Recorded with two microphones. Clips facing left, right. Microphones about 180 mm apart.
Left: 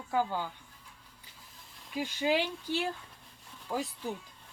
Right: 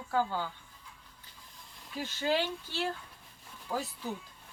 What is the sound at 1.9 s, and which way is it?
Speech, 15° left (ahead or behind).